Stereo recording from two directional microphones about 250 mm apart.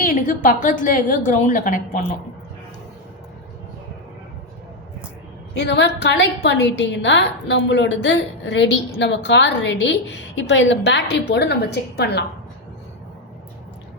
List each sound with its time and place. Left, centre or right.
0.0 s a woman's voice: left
5.5 s a woman's voice: left